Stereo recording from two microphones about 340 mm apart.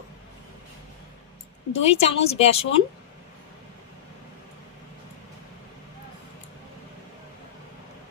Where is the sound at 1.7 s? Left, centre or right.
Centre.